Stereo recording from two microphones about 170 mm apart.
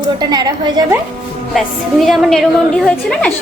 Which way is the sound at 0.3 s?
25° right (ahead or behind).